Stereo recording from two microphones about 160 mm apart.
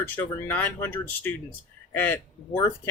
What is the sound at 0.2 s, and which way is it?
Speech, 10° left (ahead or behind).